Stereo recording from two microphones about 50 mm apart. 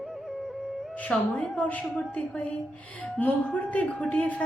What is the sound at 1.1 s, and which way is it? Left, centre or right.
A woman's voice, left.